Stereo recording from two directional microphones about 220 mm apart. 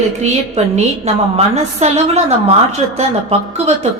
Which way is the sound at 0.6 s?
30° right (ahead or behind).